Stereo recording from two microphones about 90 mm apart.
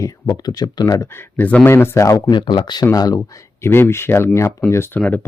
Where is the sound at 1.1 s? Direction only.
20° left (ahead or behind).